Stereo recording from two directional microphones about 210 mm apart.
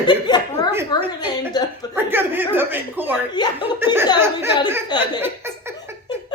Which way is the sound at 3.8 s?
10° right (ahead or behind).